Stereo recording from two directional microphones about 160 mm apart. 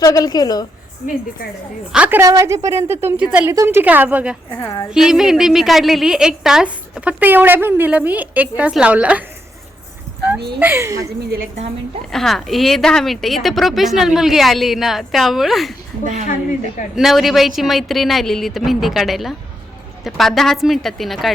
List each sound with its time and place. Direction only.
0.0 s a woman's voice: 25° left (ahead or behind)
1.9 s a woman's voice: 10° right (ahead or behind)
4.5 s speech: 15° left (ahead or behind)
4.9 s a woman's voice: 5° right (ahead or behind)
10.6 s speech: 15° right (ahead or behind)
12.1 s speech: centre (ahead or behind)
16.9 s speech: centre (ahead or behind)